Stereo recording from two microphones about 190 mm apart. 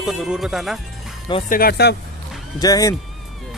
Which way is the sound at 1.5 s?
55° left (ahead or behind).